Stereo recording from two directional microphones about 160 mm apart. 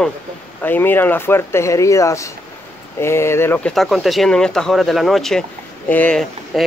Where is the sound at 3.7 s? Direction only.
Centre (ahead or behind).